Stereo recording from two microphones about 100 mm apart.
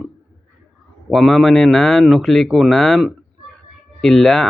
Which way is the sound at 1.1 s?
Centre (ahead or behind).